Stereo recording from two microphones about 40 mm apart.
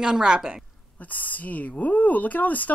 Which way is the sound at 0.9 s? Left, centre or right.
Left.